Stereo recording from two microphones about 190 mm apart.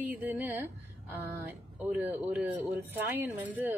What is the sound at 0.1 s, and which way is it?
Speech, 10° right (ahead or behind).